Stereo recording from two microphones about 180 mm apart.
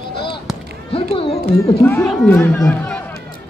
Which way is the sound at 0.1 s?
30° left (ahead or behind).